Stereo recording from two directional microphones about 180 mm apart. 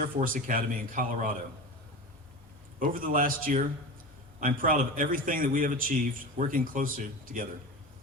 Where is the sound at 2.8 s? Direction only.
50° right (ahead or behind).